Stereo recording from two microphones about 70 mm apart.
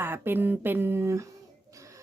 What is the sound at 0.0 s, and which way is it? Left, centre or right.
A woman's voice, right.